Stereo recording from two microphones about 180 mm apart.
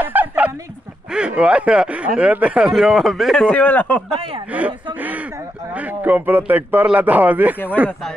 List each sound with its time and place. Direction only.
0.0 s bow-wow: 10° right (ahead or behind)
1.1 s a man's voice: 5° right (ahead or behind)
4.5 s a man's voice: 10° right (ahead or behind)